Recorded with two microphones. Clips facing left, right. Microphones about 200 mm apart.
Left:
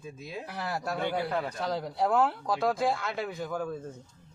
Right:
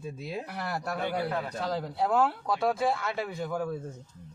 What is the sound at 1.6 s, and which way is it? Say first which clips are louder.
Speech: right 1 dB; centre (ahead or behind).